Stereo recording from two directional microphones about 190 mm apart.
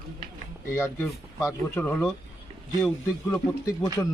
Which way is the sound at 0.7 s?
15° left (ahead or behind).